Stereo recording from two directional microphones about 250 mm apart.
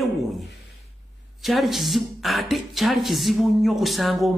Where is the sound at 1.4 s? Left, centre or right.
Centre.